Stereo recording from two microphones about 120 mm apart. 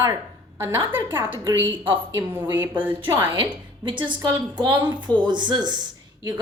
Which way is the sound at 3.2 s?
45° right (ahead or behind).